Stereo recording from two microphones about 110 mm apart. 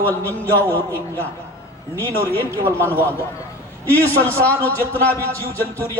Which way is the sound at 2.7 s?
15° left (ahead or behind).